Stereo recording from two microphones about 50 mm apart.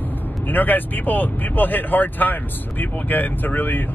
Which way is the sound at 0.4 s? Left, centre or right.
Left.